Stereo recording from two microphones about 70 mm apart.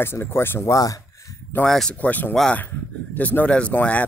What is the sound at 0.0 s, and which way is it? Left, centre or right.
Speech, left.